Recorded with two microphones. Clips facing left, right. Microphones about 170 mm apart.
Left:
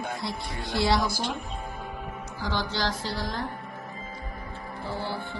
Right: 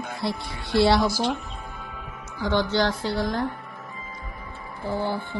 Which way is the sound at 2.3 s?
60° right (ahead or behind).